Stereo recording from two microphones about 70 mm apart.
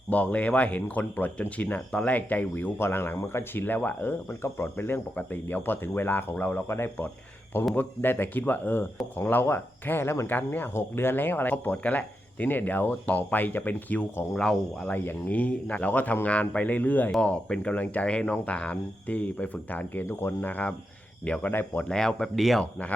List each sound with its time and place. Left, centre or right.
0.1 s speech: left
2.7 s speech: left
4.3 s speech: left
14.3 s speech: centre
14.8 s speech: left
21.5 s speech: left
21.8 s speech: centre
22.6 s speech: left